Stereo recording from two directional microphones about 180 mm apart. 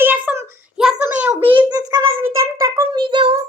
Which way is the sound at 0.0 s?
10° right (ahead or behind).